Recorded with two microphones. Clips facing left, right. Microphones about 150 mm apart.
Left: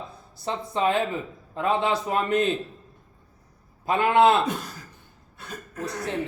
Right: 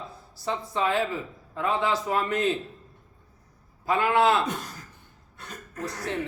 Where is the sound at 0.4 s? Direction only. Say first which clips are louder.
Left 2 dB; 20° left (ahead or behind).